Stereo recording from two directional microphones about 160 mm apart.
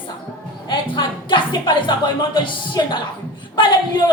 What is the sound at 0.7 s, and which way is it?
Speech, 30° left (ahead or behind).